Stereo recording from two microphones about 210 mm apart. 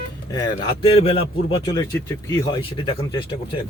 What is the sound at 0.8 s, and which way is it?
Speech, 25° left (ahead or behind).